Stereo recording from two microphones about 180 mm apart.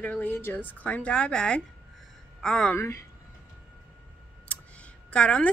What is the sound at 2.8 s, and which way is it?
Speech, 15° left (ahead or behind).